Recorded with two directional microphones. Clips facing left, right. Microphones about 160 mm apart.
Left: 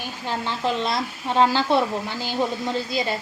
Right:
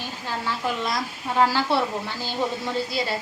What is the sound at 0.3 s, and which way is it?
Speech, 25° left (ahead or behind).